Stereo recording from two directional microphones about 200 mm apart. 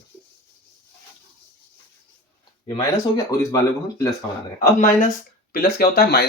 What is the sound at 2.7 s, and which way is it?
Speech, 15° left (ahead or behind).